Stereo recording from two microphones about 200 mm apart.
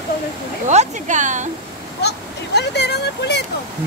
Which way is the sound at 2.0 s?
55° left (ahead or behind).